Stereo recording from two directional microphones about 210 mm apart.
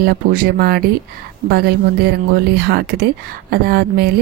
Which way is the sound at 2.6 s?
50° right (ahead or behind).